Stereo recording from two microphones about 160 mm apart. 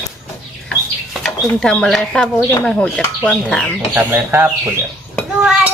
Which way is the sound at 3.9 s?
10° right (ahead or behind).